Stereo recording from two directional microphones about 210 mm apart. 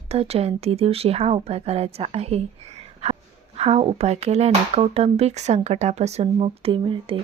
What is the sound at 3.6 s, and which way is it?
Speech, 30° right (ahead or behind).